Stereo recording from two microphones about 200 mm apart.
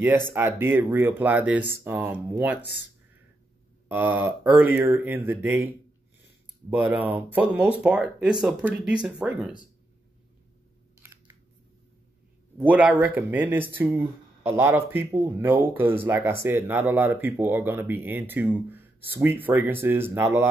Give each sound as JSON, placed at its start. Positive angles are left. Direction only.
{"t": 0.3, "sound": "speech", "side_deg": -10}
{"t": 2.6, "sound": "speech", "side_deg": 55}
{"t": 3.9, "sound": "speech", "side_deg": -10}
{"t": 6.7, "sound": "speech", "side_deg": -10}
{"t": 11.0, "sound": "a sound", "side_deg": -10}
{"t": 12.5, "sound": "speech", "side_deg": -10}